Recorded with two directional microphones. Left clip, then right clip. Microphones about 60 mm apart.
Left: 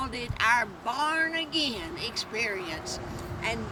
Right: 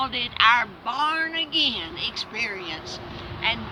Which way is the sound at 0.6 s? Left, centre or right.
Left.